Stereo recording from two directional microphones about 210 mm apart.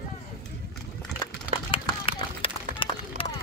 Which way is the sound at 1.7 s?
25° left (ahead or behind).